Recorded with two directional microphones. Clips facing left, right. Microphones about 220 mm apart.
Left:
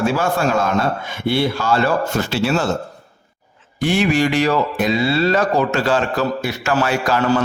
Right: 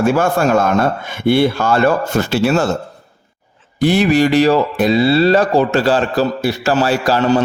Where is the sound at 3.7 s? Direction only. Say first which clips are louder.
Right 4 dB; 35° right (ahead or behind).